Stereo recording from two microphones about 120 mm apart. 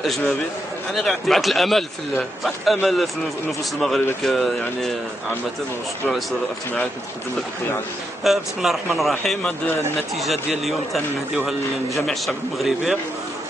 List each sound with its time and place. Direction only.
0.9 s speech: centre (ahead or behind)
8.2 s speech: centre (ahead or behind)